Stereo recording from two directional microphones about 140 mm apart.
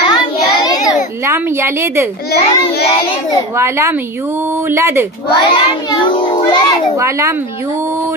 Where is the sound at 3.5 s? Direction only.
20° right (ahead or behind).